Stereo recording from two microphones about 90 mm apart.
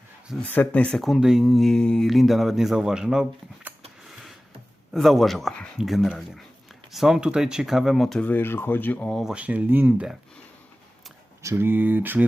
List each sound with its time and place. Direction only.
0.5 s speech: 20° left (ahead or behind)
1.0 s speech: 5° right (ahead or behind)
4.9 s speech: centre (ahead or behind)
8.2 s speech: 20° left (ahead or behind)
9.2 s speech: 10° right (ahead or behind)
11.4 s speech: 25° right (ahead or behind)